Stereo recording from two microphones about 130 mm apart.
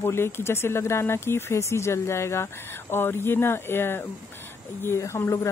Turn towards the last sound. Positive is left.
turn(degrees=20)  # may be behind; listen again after turning